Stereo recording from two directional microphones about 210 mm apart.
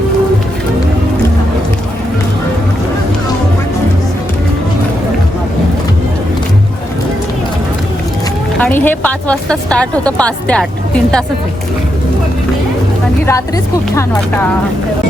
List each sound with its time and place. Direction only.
8.5 s a woman's voice: 10° left (ahead or behind)